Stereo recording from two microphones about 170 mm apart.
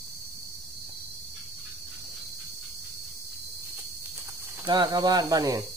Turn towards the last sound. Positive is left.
turn(degrees=-20)  # may be behind; listen again after turning